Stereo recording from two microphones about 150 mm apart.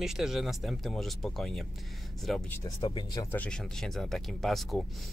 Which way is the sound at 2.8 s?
35° left (ahead or behind).